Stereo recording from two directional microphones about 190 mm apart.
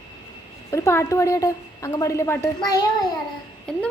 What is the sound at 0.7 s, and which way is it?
A woman's voice, 15° left (ahead or behind).